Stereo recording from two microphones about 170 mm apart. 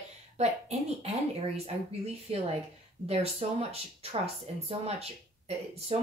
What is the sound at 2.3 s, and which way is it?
Speech, 35° right (ahead or behind).